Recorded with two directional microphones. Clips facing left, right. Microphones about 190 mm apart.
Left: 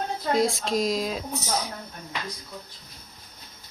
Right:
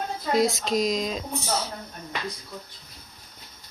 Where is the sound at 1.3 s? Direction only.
10° right (ahead or behind).